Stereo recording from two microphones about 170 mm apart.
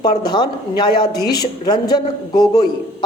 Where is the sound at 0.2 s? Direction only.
25° left (ahead or behind).